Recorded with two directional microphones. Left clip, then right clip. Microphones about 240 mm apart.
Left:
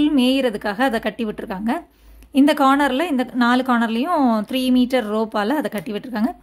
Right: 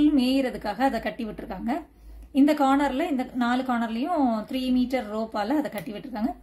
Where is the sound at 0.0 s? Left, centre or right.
Left.